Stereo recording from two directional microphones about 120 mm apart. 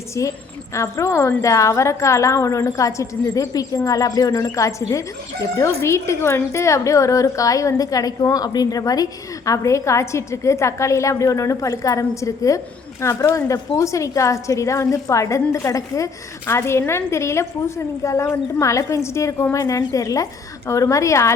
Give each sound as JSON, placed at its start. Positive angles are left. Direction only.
{"t": 0.2, "sound": "a woman's voice", "side_deg": 25}